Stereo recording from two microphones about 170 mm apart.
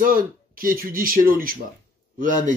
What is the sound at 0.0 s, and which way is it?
Speech, 55° right (ahead or behind).